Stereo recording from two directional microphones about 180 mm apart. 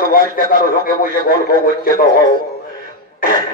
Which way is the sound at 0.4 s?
50° left (ahead or behind).